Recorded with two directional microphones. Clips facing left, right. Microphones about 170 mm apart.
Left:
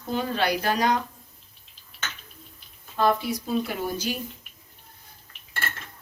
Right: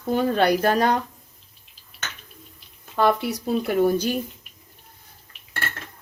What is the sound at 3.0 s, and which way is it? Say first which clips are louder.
Speech: right 2 dB; 70° right (ahead or behind).